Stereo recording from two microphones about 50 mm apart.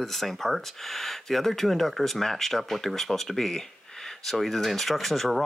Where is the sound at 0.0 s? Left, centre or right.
Centre.